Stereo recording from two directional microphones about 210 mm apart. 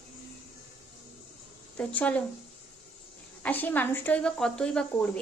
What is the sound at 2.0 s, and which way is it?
Speech, 5° left (ahead or behind).